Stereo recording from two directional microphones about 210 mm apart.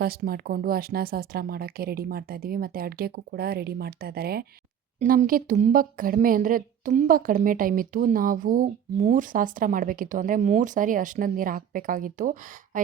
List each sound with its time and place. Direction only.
0.0 s speech: 45° right (ahead or behind)